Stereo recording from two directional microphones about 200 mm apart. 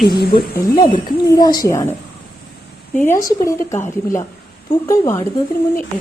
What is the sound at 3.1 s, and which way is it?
A woman's voice, 15° left (ahead or behind).